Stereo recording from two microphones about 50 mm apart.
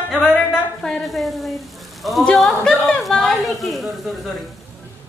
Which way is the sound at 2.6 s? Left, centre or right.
Centre.